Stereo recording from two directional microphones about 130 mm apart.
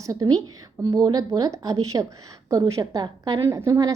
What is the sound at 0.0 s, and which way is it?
A woman's voice, 25° right (ahead or behind).